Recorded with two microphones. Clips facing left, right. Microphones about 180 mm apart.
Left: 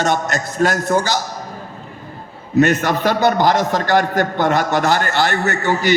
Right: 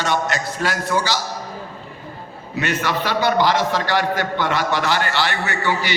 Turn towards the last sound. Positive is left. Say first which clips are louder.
# left 5 dB
turn(degrees=45)  # may be behind; listen again after turning